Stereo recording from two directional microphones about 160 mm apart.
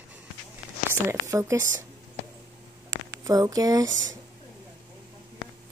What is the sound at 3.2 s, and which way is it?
Speech, 20° right (ahead or behind).